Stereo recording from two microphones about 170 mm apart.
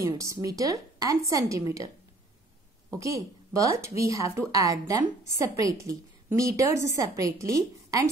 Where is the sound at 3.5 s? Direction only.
20° right (ahead or behind).